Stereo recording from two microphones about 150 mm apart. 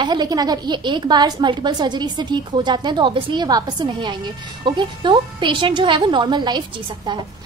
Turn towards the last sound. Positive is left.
turn(degrees=-30)  # may be behind; listen again after turning